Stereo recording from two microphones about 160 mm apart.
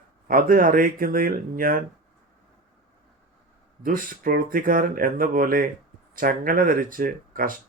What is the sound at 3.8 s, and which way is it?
Speech, 60° right (ahead or behind).